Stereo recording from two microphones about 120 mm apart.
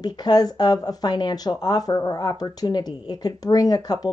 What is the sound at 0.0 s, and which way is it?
Speech, 35° left (ahead or behind).